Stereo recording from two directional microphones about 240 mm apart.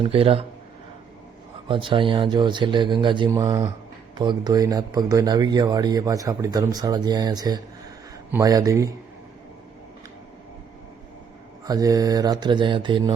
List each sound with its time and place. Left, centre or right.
0.0 s speech: right
1.6 s speech: right
11.6 s speech: centre